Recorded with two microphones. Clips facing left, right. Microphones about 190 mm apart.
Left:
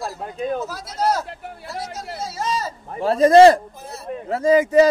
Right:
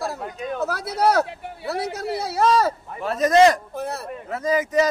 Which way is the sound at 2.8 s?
30° left (ahead or behind).